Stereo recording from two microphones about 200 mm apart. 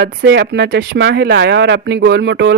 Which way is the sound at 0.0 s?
60° right (ahead or behind).